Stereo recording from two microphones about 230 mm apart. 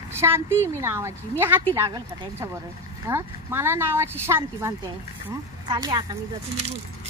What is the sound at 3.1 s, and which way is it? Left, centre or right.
A woman's voice, centre.